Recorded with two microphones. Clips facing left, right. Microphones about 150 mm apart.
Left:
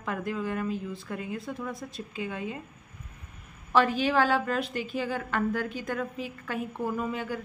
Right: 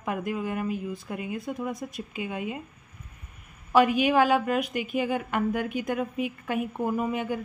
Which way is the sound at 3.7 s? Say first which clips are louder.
Right 3 dB; 15° right (ahead or behind).